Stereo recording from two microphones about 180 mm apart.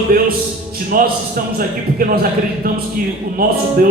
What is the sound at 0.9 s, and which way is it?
A man's voice, 50° right (ahead or behind).